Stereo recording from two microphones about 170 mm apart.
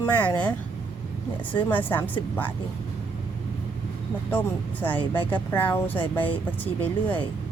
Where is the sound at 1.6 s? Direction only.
10° left (ahead or behind).